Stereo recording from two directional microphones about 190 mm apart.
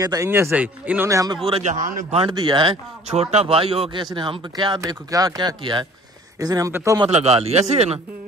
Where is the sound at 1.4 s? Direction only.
35° right (ahead or behind).